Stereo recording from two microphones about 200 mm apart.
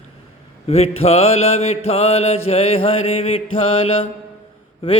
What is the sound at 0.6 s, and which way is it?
Mantra, 30° left (ahead or behind).